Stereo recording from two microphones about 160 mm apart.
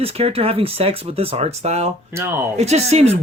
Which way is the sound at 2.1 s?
15° right (ahead or behind).